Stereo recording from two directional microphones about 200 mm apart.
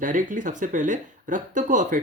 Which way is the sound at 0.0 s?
40° right (ahead or behind).